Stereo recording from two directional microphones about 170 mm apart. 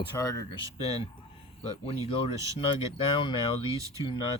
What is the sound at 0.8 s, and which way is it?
Speech, 35° left (ahead or behind).